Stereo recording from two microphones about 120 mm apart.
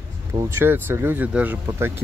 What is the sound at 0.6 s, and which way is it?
Speech, 15° right (ahead or behind).